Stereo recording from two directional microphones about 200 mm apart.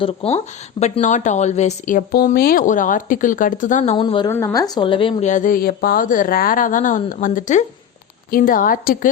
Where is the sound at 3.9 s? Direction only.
25° left (ahead or behind).